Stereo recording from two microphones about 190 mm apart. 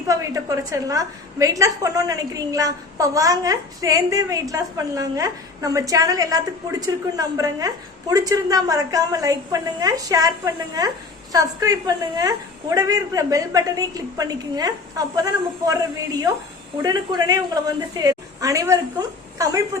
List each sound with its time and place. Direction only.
0.1 s a woman's voice: 15° right (ahead or behind)
16.8 s a woman's voice: 20° right (ahead or behind)